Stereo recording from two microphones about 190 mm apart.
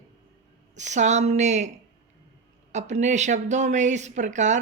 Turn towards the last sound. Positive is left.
turn(degrees=-40)  # may be behind; listen again after turning